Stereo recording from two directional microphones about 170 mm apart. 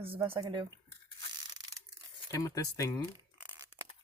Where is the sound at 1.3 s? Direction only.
25° right (ahead or behind).